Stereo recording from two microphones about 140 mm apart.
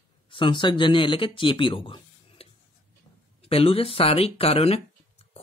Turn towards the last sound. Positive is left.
turn(degrees=45)  # may be behind; listen again after turning